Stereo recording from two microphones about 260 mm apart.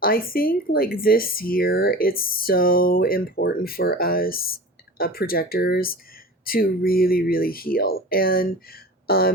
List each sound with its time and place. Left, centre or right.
0.0 s speech: left